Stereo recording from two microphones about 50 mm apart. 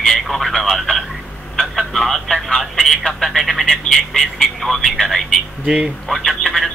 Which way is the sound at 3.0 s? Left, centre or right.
Centre.